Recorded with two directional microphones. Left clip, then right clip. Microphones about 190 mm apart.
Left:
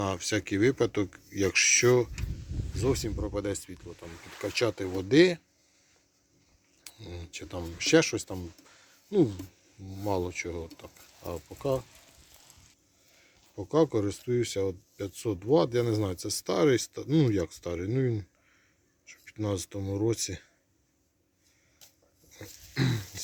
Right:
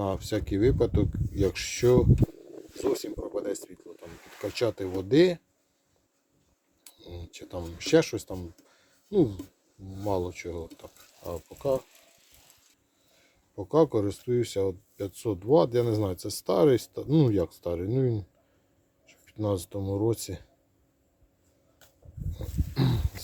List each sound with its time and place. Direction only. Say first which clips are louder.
0.0 s speech: even; 5° right (ahead or behind)
3.4 s speech: right 1 dB; 5° left (ahead or behind)
6.8 s speech: left 1 dB; centre (ahead or behind)
13.1 s speech: right 2 dB; 5° right (ahead or behind)
22.3 s a sound: right 5 dB; centre (ahead or behind)